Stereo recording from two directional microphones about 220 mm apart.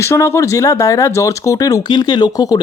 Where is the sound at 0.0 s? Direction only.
10° left (ahead or behind).